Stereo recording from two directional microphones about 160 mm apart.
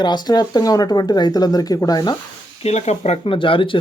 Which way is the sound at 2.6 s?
45° left (ahead or behind).